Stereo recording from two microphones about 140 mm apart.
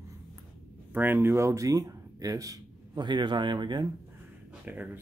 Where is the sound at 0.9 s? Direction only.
15° right (ahead or behind); by 3.9 s 30° right (ahead or behind).